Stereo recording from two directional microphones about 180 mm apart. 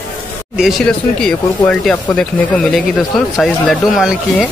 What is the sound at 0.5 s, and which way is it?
Speech, centre (ahead or behind).